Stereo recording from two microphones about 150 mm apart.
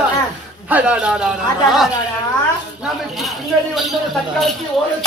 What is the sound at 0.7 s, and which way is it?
Speech, 10° right (ahead or behind).